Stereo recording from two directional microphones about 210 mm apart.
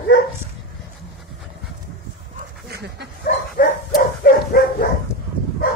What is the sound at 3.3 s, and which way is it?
Dog, 45° left (ahead or behind).